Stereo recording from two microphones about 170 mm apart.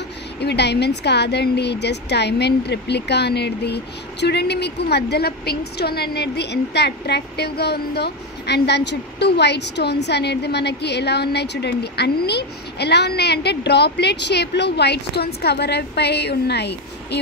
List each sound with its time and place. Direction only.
0.4 s speech: 80° left